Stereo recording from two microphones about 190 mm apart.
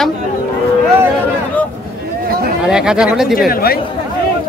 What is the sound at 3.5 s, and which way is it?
Speech, 50° left (ahead or behind).